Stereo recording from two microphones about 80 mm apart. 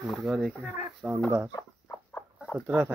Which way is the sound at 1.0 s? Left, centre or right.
Centre.